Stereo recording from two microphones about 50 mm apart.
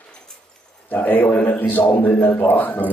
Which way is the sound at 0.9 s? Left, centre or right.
Left.